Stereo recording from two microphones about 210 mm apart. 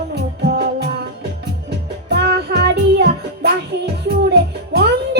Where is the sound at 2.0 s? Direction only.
50° right (ahead or behind).